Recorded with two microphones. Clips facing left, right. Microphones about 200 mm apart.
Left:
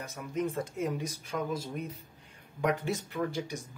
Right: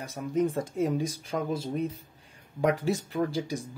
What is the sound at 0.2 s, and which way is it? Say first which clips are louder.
Speech: right 6 dB; 40° right (ahead or behind).